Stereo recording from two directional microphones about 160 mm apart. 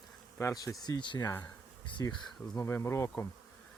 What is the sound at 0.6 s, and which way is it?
Speech, 25° left (ahead or behind).